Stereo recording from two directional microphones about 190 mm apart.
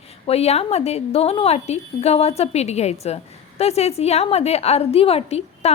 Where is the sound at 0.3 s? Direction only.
35° left (ahead or behind).